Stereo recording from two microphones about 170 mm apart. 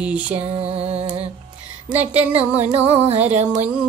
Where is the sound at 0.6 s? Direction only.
35° right (ahead or behind).